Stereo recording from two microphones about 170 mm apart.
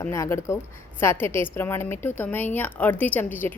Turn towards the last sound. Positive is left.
turn(degrees=10)  # may be behind; listen again after turning